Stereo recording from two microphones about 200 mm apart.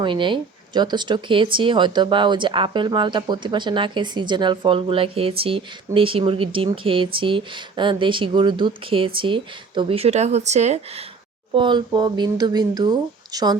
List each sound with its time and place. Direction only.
0.0 s speech: 25° right (ahead or behind)
11.5 s speech: 25° right (ahead or behind)